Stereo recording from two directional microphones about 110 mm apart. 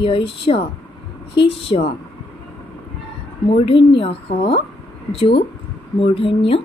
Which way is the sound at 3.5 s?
55° left (ahead or behind).